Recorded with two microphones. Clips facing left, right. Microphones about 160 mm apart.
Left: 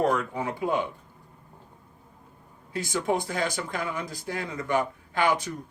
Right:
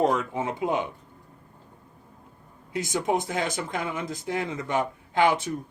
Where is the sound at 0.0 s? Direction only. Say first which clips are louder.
Right 1 dB; 20° right (ahead or behind).